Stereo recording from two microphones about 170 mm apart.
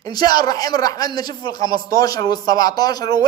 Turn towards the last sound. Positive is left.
turn(degrees=25)  # may be behind; listen again after turning